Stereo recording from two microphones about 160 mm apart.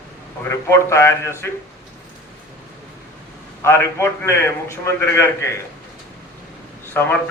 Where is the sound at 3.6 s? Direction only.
15° left (ahead or behind).